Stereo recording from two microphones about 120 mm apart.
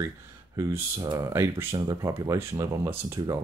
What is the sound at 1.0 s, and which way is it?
Speech, 35° right (ahead or behind).